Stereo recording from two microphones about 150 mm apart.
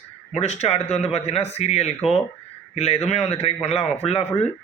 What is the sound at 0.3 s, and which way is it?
Speech, 45° left (ahead or behind).